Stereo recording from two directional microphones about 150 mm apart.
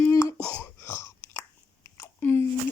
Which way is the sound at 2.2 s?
15° left (ahead or behind).